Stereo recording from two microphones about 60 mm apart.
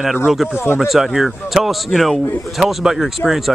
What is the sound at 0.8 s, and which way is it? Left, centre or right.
Speech, centre.